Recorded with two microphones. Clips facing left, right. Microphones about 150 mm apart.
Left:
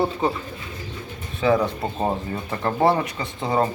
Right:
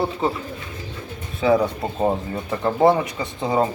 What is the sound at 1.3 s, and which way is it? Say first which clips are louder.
Speech: right 2 dB; 10° right (ahead or behind).